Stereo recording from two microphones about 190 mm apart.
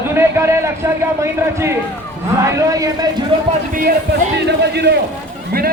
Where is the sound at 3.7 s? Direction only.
50° right (ahead or behind).